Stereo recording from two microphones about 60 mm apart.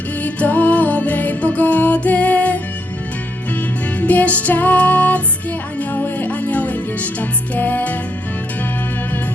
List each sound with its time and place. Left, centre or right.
0.2 s music: left
3.9 s music: left